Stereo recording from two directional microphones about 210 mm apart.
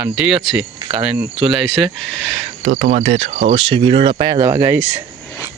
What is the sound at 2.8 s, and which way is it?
Speech, 30° right (ahead or behind).